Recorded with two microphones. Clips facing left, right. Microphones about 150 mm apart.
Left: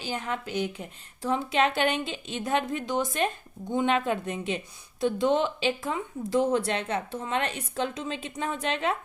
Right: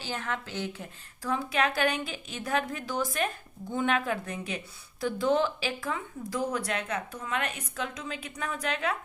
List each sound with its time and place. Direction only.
0.0 s speech: 15° left (ahead or behind)